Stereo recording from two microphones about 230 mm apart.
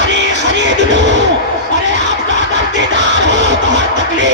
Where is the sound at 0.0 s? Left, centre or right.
Right.